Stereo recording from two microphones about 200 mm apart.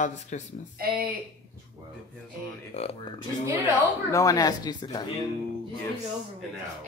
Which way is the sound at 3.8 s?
15° left (ahead or behind).